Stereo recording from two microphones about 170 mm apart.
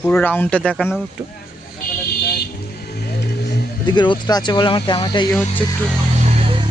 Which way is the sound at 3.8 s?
25° left (ahead or behind).